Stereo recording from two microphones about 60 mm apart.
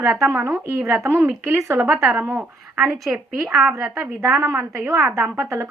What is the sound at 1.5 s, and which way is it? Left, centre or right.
Speech, right.